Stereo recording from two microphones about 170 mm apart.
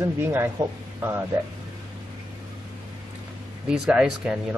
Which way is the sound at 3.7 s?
5° right (ahead or behind).